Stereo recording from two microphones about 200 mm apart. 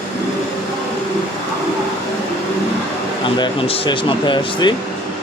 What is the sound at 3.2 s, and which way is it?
A man's voice, 25° left (ahead or behind).